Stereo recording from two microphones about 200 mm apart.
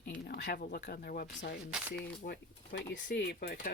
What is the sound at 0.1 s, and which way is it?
Speech, 50° left (ahead or behind).